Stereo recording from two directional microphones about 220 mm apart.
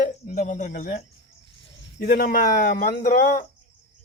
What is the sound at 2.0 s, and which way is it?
A man's voice, 45° left (ahead or behind).